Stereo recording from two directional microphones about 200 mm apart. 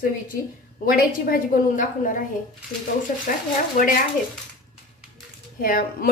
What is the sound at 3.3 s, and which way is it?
Speech, 45° left (ahead or behind).